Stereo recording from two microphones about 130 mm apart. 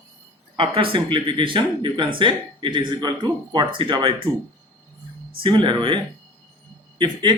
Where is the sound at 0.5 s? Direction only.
45° right (ahead or behind).